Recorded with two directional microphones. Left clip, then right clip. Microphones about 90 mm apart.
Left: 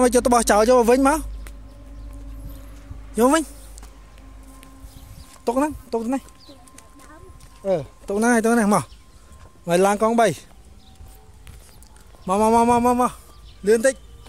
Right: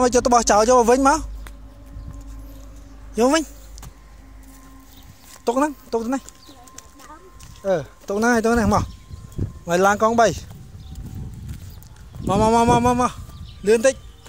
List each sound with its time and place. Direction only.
0.0 s speech: 45° left (ahead or behind)
3.2 s speech: 30° left (ahead or behind)
5.4 s speech: 25° left (ahead or behind)
7.6 s speech: 20° left (ahead or behind)
8.1 s speech: 35° left (ahead or behind)
9.7 s speech: 55° left (ahead or behind)
12.3 s speech: 30° left (ahead or behind)
12.5 s speech: 10° left (ahead or behind)